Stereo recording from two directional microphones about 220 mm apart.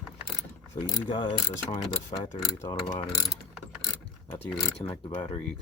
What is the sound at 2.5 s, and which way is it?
Mechanisms, 15° left (ahead or behind).